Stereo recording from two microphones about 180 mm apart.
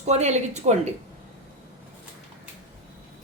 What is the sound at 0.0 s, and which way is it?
Speech, 40° right (ahead or behind).